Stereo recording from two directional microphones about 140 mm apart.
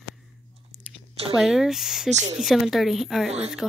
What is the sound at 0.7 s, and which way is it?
Chewing, 5° right (ahead or behind).